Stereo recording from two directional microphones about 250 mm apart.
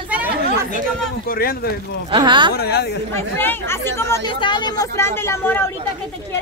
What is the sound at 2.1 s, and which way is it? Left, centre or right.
Speech, centre.